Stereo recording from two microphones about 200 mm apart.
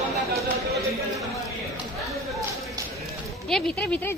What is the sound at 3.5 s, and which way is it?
Speech, 5° left (ahead or behind).